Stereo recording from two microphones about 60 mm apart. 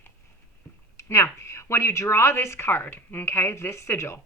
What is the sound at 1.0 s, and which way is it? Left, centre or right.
A woman's voice, left.